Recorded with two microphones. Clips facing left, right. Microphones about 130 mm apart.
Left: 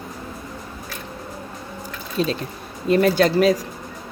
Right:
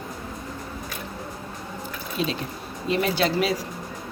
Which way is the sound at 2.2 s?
40° left (ahead or behind).